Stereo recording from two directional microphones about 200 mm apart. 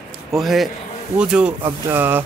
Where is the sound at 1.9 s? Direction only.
10° right (ahead or behind).